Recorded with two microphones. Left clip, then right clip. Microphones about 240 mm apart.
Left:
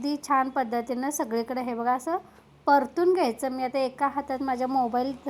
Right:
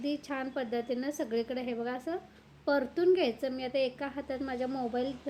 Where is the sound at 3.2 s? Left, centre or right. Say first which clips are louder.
Left 5 dB; left.